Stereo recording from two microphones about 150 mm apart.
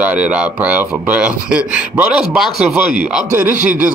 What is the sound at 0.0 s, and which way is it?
Speech, 5° right (ahead or behind).